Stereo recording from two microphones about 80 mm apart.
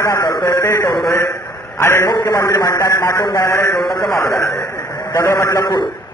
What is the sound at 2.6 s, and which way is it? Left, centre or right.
A man's voice, left.